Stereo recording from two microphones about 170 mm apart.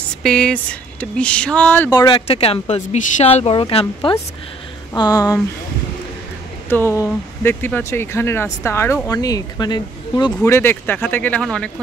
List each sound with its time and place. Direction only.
0.2 s speech: 5° left (ahead or behind)
1.9 s speech: 25° left (ahead or behind)
6.7 s speech: 15° left (ahead or behind)
10.4 s speech: 15° left (ahead or behind)